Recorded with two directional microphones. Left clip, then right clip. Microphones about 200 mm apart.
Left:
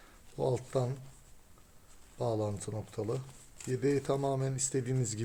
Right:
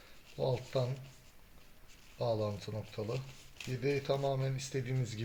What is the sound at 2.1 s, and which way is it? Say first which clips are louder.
Speech: left 1 dB; 60° left (ahead or behind).